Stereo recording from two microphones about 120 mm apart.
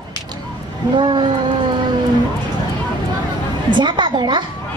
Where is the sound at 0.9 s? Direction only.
40° right (ahead or behind).